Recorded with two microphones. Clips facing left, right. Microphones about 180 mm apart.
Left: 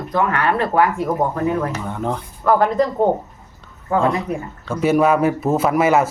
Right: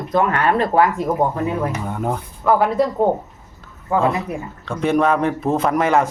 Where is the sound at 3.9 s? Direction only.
5° right (ahead or behind).